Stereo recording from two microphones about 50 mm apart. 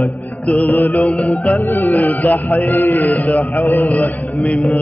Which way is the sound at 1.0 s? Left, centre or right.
Left.